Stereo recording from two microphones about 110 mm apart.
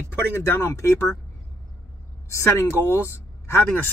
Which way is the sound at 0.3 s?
25° left (ahead or behind).